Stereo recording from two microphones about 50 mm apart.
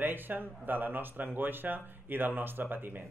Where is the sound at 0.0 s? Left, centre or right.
Right.